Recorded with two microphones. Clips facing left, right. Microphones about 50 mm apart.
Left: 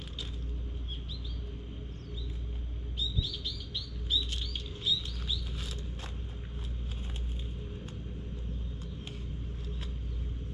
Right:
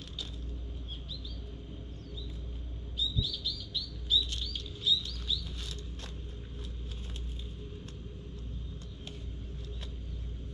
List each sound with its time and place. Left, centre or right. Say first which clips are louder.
3.0 s chirp: right 2 dB; left